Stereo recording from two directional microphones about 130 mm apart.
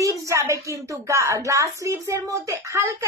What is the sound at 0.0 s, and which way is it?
Speech, 25° right (ahead or behind).